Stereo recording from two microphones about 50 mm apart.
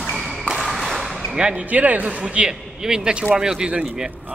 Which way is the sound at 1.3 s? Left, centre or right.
Right.